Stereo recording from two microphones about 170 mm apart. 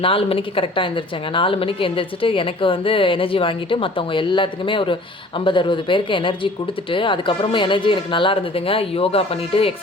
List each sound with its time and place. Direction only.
0.0 s speech: 35° left (ahead or behind)